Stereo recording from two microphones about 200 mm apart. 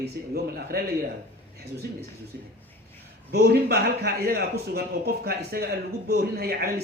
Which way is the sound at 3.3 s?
55° right (ahead or behind).